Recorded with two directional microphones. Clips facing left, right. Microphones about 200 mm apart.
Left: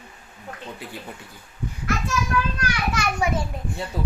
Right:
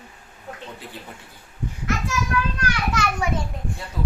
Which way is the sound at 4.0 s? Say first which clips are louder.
Right 1 dB; 30° left (ahead or behind).